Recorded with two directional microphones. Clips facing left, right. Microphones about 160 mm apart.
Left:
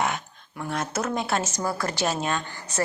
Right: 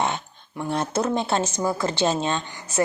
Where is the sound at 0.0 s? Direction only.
25° right (ahead or behind).